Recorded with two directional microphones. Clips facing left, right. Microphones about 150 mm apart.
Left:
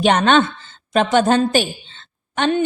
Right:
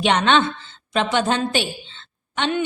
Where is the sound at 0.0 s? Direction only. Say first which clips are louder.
Left 3 dB; 45° left (ahead or behind).